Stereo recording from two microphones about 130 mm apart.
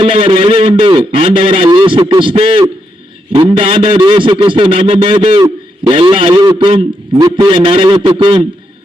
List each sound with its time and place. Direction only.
0.0 s a man's voice: 45° right (ahead or behind)